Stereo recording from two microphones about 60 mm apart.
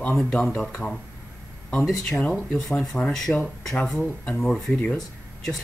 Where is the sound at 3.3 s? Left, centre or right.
Left; by 4.7 s centre.